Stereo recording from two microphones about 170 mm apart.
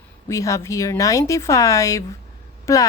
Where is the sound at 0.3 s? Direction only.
20° left (ahead or behind).